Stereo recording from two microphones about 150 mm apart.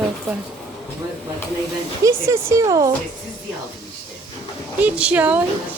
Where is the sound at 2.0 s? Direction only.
20° right (ahead or behind).